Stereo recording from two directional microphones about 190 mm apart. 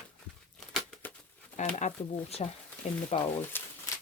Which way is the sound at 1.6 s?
40° left (ahead or behind).